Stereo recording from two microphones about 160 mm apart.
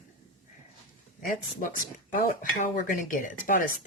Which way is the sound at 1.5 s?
60° left (ahead or behind).